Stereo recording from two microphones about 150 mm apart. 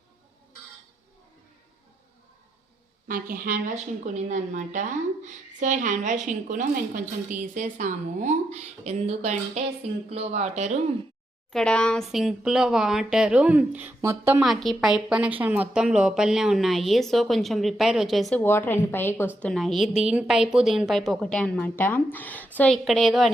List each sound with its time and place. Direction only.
3.1 s speech: 70° right (ahead or behind); by 10.8 s 50° right (ahead or behind)
11.5 s a woman's voice: 5° left (ahead or behind); by 14.4 s 15° right (ahead or behind)
14.4 s a woman's voice: centre (ahead or behind)
18.3 s a woman's voice: 15° left (ahead or behind)